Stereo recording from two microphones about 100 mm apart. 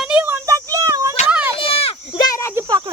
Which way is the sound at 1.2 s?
10° right (ahead or behind).